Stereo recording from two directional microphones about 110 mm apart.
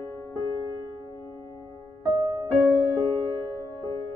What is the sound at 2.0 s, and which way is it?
Music, 35° right (ahead or behind).